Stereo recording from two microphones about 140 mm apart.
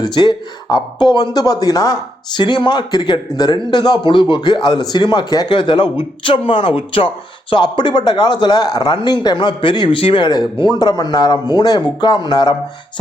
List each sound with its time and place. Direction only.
0.0 s speech: 30° left (ahead or behind)